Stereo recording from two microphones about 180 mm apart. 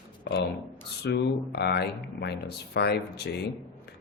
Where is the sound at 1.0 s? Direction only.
65° left (ahead or behind).